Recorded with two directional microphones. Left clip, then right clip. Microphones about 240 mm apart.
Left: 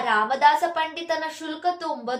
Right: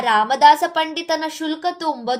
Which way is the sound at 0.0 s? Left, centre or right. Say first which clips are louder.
Right 6 dB; right.